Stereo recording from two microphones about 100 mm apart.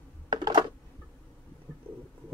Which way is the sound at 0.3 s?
45° right (ahead or behind).